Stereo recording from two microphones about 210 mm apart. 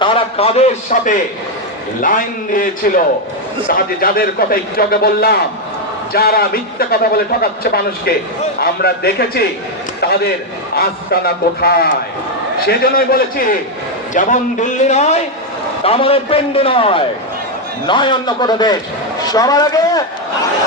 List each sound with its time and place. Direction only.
0.0 s a man's voice: 25° left (ahead or behind)